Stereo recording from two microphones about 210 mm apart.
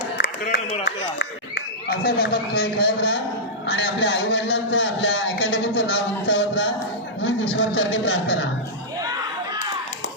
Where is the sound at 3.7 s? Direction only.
55° left (ahead or behind).